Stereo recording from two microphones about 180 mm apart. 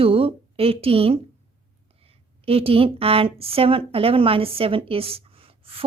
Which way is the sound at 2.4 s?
30° right (ahead or behind).